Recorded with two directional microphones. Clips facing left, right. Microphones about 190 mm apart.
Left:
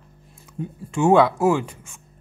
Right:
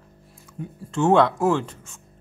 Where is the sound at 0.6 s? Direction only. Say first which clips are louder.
Left 4 dB; 25° left (ahead or behind).